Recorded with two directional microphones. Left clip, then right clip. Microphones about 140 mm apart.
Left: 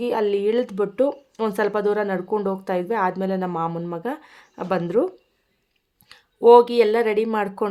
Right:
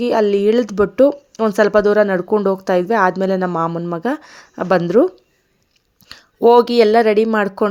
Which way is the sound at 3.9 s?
40° right (ahead or behind).